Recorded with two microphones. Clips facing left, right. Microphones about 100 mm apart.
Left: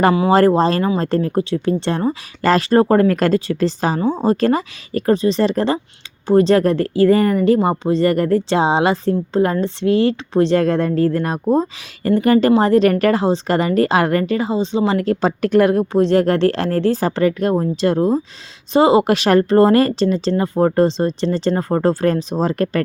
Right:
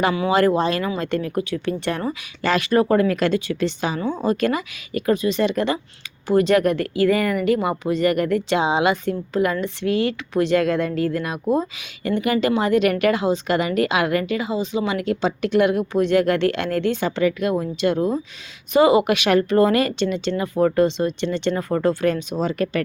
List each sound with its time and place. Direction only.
0.0 s speech: 40° left (ahead or behind)
14.9 s speech: 40° left (ahead or behind)